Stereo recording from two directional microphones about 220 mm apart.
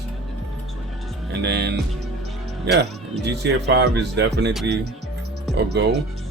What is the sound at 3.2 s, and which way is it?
Speech, 50° right (ahead or behind).